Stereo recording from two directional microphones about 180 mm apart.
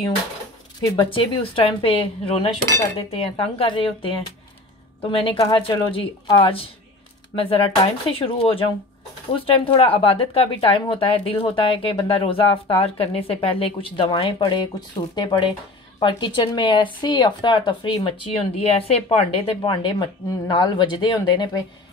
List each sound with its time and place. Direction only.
0.7 s speech: 25° left (ahead or behind)